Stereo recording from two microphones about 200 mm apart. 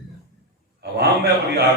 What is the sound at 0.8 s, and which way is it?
Speech, 55° right (ahead or behind).